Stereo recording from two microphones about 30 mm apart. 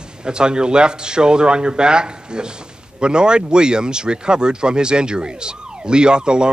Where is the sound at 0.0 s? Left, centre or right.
Right.